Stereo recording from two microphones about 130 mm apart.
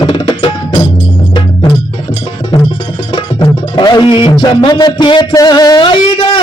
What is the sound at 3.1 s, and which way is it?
Speech, 30° left (ahead or behind).